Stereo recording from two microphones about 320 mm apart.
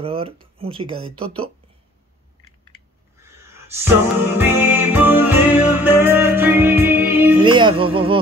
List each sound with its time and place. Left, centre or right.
0.0 s speech: centre
3.3 s music: centre